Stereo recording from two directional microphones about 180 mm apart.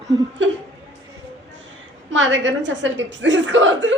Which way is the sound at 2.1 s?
90° right.